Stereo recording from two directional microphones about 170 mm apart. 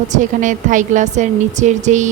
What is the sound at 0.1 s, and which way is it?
A woman's voice, 45° right (ahead or behind).